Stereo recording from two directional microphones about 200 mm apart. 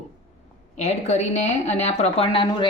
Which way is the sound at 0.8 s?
35° left (ahead or behind).